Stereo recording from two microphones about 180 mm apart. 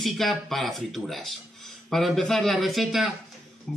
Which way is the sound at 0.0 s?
Centre (ahead or behind).